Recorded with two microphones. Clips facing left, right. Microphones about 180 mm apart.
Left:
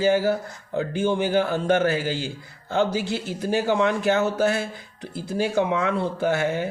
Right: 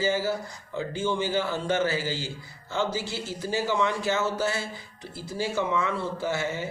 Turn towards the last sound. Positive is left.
turn(degrees=60)  # may be behind; listen again after turning